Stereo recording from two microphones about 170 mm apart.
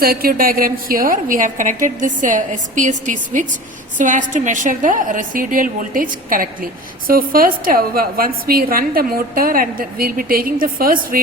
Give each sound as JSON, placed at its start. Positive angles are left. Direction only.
{"t": 0.0, "sound": "a woman's voice", "side_deg": -60}